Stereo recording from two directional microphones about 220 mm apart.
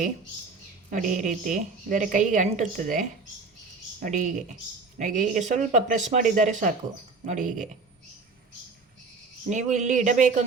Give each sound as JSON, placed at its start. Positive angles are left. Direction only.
{"t": 0.9, "sound": "a woman's voice", "side_deg": -35}
{"t": 4.0, "sound": "a woman's voice", "side_deg": -35}
{"t": 9.5, "sound": "a woman's voice", "side_deg": -35}